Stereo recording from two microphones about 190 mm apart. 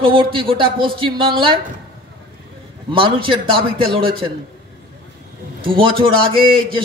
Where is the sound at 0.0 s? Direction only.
25° right (ahead or behind).